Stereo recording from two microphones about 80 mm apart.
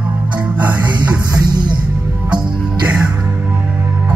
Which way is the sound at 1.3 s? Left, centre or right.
Right.